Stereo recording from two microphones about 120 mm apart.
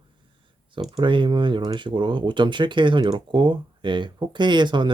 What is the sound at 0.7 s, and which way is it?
Speech, 40° right (ahead or behind).